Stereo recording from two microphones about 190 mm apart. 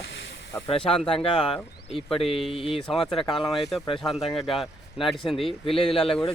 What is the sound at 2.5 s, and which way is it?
Speech, 30° left (ahead or behind).